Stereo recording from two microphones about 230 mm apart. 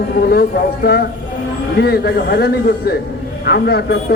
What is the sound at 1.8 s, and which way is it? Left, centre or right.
A man's voice, left.